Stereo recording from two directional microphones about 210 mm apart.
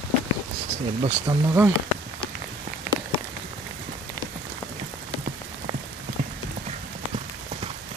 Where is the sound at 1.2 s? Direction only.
10° right (ahead or behind).